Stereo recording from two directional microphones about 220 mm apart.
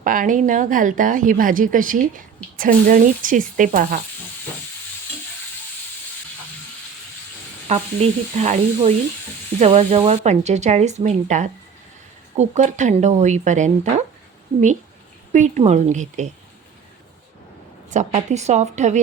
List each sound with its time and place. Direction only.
0.0 s a woman's voice: 35° right (ahead or behind)
7.7 s sizzle: 30° right (ahead or behind)
9.6 s a woman's voice: 30° right (ahead or behind)
15.3 s a woman's voice: 30° right (ahead or behind)
17.9 s a woman's voice: 30° right (ahead or behind)